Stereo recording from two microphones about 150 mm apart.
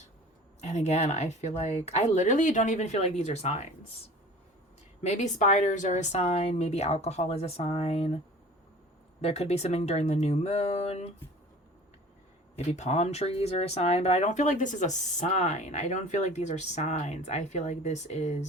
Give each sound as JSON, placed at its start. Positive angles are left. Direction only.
{"t": 0.6, "sound": "speech", "side_deg": 50}
{"t": 5.0, "sound": "speech", "side_deg": 50}
{"t": 9.2, "sound": "speech", "side_deg": 45}
{"t": 12.5, "sound": "speech", "side_deg": 50}